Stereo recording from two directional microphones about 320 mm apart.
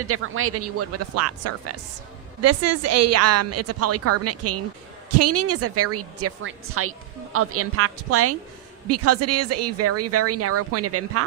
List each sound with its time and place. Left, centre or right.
0.1 s speech: right